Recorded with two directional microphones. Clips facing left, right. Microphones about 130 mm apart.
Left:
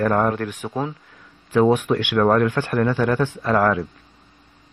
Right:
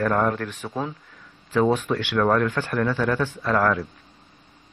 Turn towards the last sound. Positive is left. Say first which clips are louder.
# left 3 dB
turn(degrees=15)  # may be behind; listen again after turning